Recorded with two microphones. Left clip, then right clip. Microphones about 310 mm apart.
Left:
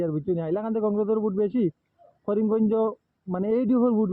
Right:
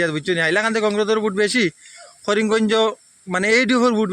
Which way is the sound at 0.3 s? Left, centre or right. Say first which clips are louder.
Right 9 dB; right.